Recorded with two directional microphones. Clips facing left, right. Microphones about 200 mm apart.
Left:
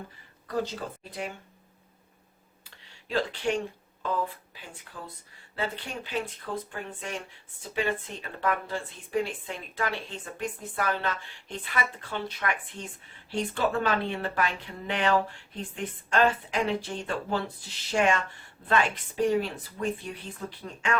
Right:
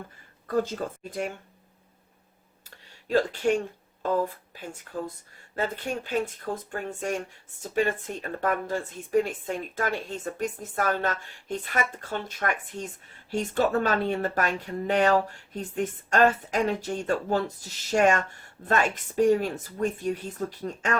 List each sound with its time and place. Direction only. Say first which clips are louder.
0.4 s speech: right 4 dB; 50° right (ahead or behind)
2.6 s a sound: right 6 dB; 45° right (ahead or behind)
4.0 s speech: right 4 dB; 45° right (ahead or behind)